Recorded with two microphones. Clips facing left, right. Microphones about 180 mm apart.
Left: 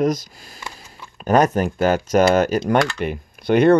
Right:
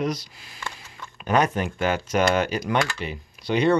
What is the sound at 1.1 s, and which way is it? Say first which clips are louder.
Speech: left 6 dB; 40° left (ahead or behind).